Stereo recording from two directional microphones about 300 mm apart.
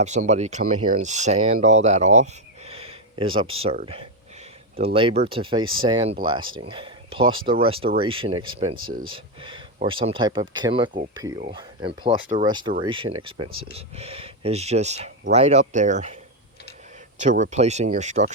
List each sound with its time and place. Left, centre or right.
0.0 s speech: right
17.2 s speech: right